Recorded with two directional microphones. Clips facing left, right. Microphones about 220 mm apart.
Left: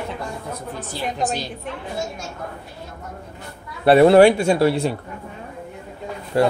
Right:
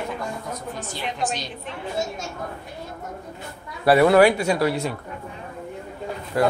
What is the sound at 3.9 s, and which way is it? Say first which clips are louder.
Speech: left 4 dB; 25° left (ahead or behind).